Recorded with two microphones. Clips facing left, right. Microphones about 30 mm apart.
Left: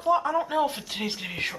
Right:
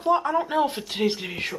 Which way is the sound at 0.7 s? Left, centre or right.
Centre.